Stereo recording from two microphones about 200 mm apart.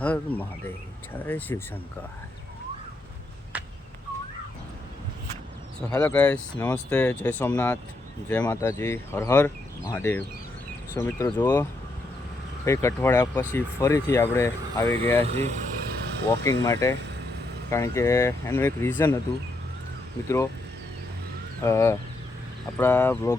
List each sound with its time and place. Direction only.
0.0 s speech: 5° left (ahead or behind)
3.5 s a sound: 5° right (ahead or behind)
5.9 s speech: 10° left (ahead or behind)
12.6 s speech: 15° left (ahead or behind)
15.2 s speech: 30° right (ahead or behind)
16.3 s speech: 15° left (ahead or behind)
20.2 s speech: 15° left (ahead or behind)
21.6 s speech: 15° left (ahead or behind)